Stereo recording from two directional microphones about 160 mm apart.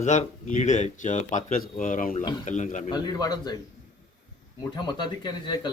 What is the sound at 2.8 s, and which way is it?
Speech, 25° left (ahead or behind).